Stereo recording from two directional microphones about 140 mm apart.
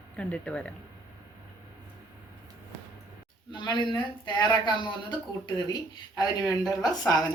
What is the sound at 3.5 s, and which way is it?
A man's voice, 30° left (ahead or behind).